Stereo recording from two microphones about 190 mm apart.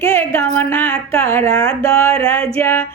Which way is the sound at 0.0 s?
15° left (ahead or behind).